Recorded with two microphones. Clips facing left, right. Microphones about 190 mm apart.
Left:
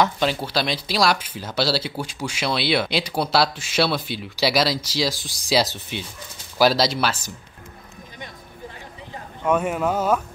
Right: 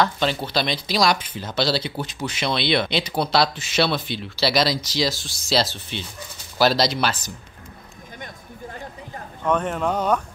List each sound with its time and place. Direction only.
0.0 s speech: 10° left (ahead or behind)
9.4 s speech: 10° left (ahead or behind)